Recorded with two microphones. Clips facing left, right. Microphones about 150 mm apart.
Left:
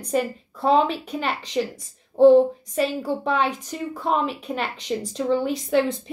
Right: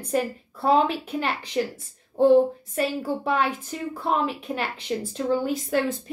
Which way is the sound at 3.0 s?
5° right (ahead or behind).